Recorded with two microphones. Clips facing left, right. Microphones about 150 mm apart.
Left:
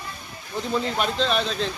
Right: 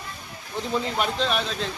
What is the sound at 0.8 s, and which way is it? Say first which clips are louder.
Speech: left 1 dB; 15° right (ahead or behind).